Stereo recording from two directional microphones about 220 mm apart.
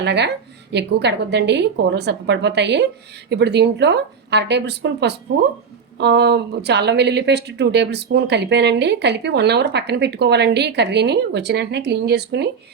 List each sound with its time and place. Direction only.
0.0 s speech: 50° right (ahead or behind)